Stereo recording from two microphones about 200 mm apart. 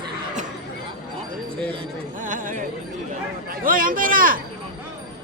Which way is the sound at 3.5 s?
45° right (ahead or behind).